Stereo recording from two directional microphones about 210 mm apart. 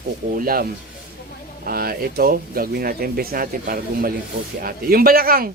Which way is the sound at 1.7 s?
45° right (ahead or behind).